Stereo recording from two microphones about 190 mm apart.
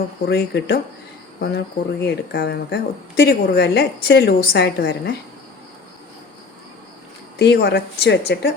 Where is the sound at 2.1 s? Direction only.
60° left (ahead or behind).